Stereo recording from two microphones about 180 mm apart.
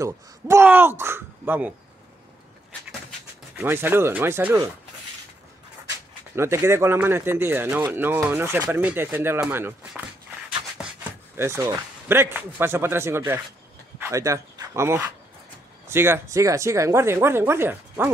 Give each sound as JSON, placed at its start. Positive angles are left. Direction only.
{"t": 0.0, "sound": "speech", "side_deg": -15}
{"t": 3.5, "sound": "speech", "side_deg": -10}
{"t": 6.3, "sound": "speech", "side_deg": -15}
{"t": 11.3, "sound": "speech", "side_deg": -15}